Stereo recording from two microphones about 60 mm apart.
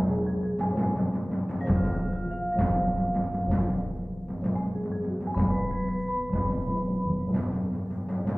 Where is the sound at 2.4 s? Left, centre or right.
Centre.